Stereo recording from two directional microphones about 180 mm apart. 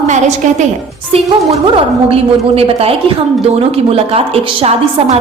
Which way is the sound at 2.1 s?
35° right (ahead or behind).